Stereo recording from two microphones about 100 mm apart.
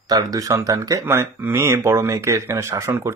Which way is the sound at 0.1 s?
35° right (ahead or behind).